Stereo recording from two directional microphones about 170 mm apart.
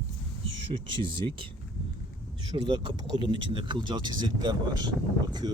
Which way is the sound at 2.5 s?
25° right (ahead or behind).